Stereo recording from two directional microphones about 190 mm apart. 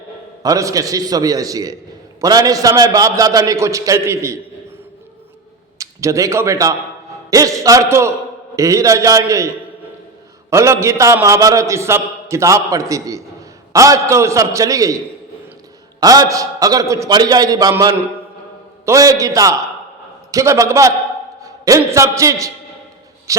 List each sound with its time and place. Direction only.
0.4 s a man's voice: 15° right (ahead or behind)
5.7 s a man's voice: 15° right (ahead or behind)
10.5 s a man's voice: 15° right (ahead or behind)
23.3 s a sound: 15° right (ahead or behind)